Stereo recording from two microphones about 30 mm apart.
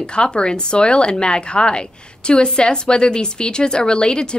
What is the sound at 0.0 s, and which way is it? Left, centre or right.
A woman's voice, left.